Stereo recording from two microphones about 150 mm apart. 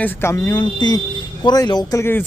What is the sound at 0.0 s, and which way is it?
A man's voice, 15° left (ahead or behind).